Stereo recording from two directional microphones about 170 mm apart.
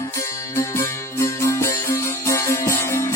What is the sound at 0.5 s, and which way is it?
Music, 15° left (ahead or behind).